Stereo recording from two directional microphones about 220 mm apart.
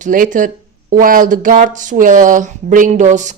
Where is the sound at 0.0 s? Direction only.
35° right (ahead or behind).